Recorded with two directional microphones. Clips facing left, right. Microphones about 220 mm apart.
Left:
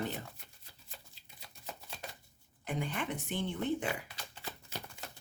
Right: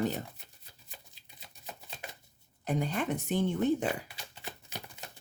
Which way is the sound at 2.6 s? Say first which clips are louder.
Right 5 dB; 40° right (ahead or behind).